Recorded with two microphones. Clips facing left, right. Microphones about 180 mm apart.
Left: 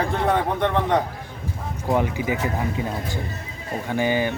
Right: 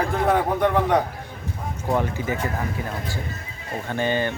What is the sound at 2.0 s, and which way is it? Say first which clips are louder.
Speech: left 3 dB; 15° left (ahead or behind).